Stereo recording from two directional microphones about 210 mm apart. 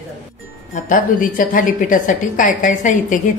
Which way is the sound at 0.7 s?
40° left (ahead or behind).